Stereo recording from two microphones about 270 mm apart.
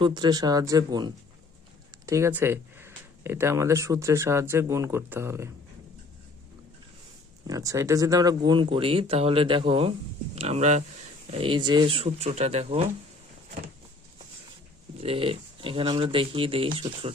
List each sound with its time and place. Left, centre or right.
0.0 s speech: centre
7.4 s speech: centre
14.9 s speech: right